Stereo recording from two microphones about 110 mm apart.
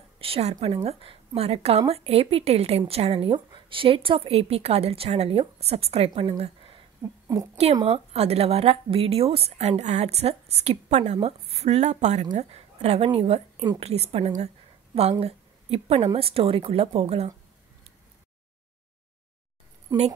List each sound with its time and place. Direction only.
0.2 s speech: 70° right (ahead or behind)
3.3 s speech: 45° right (ahead or behind); by 6.8 s 65° right (ahead or behind)
7.0 s speech: 30° right (ahead or behind)
7.8 s speech: 70° right (ahead or behind)
15.0 s a woman's voice: 70° right (ahead or behind)